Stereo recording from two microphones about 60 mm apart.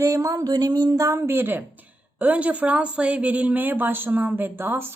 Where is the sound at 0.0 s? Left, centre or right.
Right.